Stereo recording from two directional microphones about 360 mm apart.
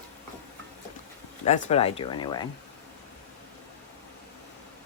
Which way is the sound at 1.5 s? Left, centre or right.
Centre.